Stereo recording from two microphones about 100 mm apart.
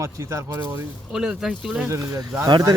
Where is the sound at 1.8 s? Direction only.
30° right (ahead or behind).